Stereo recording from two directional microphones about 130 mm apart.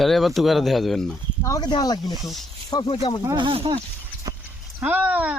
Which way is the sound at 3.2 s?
35° right (ahead or behind).